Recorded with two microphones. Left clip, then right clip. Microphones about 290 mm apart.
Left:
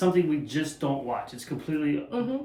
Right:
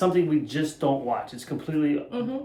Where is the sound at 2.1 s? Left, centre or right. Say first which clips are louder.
Even; centre.